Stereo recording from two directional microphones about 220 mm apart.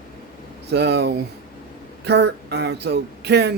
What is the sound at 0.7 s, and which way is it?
A man's voice, 50° right (ahead or behind).